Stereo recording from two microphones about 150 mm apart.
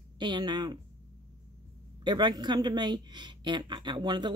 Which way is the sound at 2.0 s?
30° right (ahead or behind).